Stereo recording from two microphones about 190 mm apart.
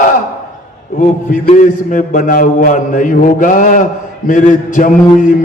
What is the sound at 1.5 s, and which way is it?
A man's voice, 40° left (ahead or behind).